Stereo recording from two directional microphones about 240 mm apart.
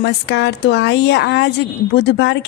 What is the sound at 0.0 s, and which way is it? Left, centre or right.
A woman's voice, left.